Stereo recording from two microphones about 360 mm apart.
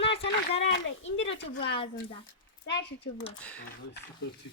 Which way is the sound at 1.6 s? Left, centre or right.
Centre.